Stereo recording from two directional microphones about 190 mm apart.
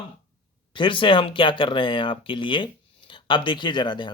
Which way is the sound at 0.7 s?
25° left (ahead or behind).